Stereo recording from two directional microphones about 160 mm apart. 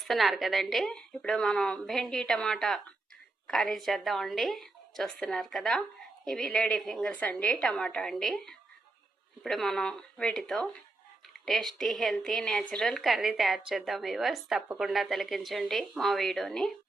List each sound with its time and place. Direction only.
0.0 s a woman's voice: centre (ahead or behind)